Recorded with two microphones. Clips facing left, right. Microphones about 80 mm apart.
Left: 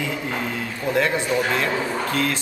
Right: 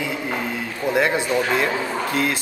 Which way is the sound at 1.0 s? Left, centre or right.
Centre.